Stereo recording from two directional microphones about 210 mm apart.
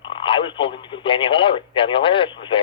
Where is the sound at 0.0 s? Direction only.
25° left (ahead or behind).